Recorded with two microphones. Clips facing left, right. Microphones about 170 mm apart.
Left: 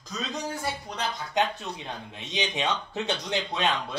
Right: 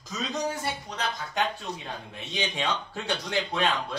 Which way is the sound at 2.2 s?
20° left (ahead or behind).